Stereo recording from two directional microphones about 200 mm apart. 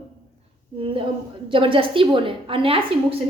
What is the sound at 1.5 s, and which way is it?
A woman's voice, 25° right (ahead or behind).